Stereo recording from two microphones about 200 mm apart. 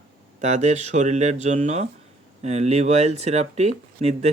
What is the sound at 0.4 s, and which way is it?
Speech, 35° right (ahead or behind).